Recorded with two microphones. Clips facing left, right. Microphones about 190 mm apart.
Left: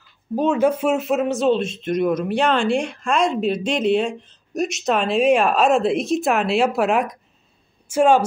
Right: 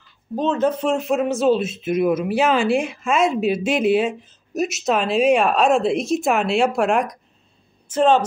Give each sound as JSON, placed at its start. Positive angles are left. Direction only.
{"t": 0.4, "sound": "speech", "side_deg": 10}